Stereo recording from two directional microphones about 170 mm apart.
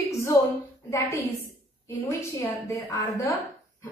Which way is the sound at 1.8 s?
15° left (ahead or behind).